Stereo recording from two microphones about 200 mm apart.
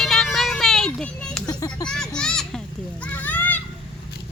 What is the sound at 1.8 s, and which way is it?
Speech, 5° left (ahead or behind).